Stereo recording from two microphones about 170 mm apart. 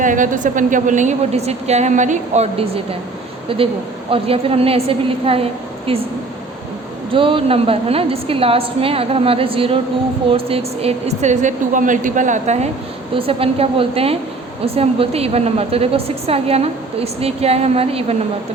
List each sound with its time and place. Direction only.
0.0 s a woman's voice: 50° right (ahead or behind); by 6.0 s 35° right (ahead or behind)
7.1 s a woman's voice: 30° right (ahead or behind)
13.1 s a woman's voice: 35° right (ahead or behind)